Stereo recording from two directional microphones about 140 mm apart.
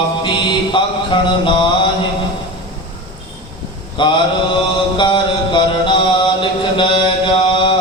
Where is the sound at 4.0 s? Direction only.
35° left (ahead or behind).